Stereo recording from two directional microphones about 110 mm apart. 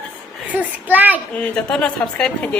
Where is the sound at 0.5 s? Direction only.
15° right (ahead or behind).